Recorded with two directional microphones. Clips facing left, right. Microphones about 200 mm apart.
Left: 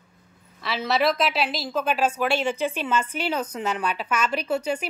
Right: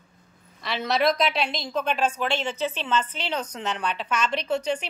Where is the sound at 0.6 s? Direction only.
Centre (ahead or behind).